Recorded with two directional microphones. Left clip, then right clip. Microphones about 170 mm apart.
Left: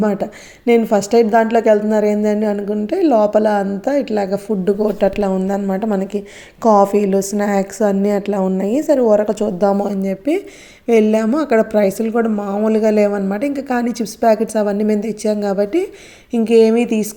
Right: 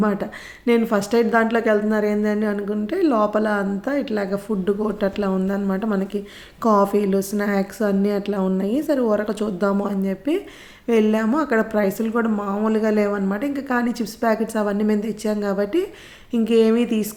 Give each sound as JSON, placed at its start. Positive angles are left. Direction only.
{"t": 0.0, "sound": "a woman's voice", "side_deg": 20}